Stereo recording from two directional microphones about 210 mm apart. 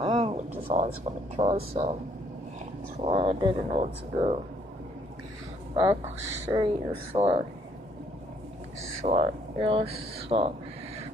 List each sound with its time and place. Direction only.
0.0 s a sound: 25° right (ahead or behind)
0.7 s speech: 30° right (ahead or behind)
3.0 s speech: 25° right (ahead or behind)
6.5 s speech: 25° right (ahead or behind)
8.9 s speech: 30° right (ahead or behind)